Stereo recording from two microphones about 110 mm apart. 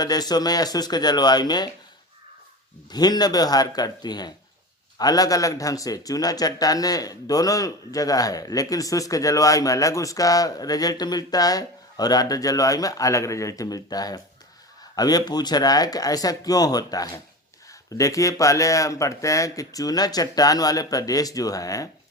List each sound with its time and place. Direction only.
0.0 s speech: 35° left (ahead or behind)
2.9 s speech: 40° left (ahead or behind)